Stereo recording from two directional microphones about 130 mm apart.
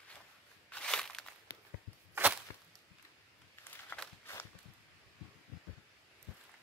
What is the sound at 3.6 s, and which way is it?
Walk, 15° left (ahead or behind).